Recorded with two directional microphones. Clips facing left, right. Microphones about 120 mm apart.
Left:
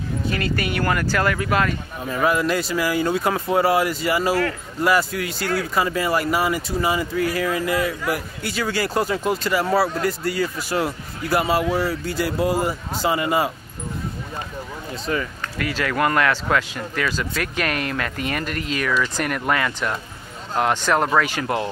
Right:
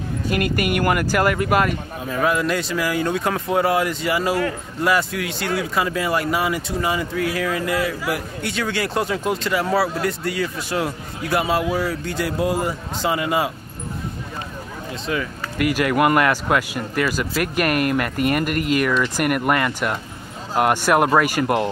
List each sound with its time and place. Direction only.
0.7 s speech: 10° right (ahead or behind)
2.0 s speech: centre (ahead or behind)
15.0 s speech: 5° right (ahead or behind)